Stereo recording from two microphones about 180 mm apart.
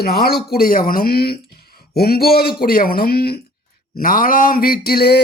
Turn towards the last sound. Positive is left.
turn(degrees=60)  # may be behind; listen again after turning